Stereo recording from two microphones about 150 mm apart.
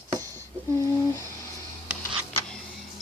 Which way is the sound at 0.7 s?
20° left (ahead or behind).